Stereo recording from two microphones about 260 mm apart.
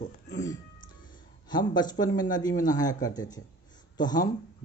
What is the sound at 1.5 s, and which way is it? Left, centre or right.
Speech, centre.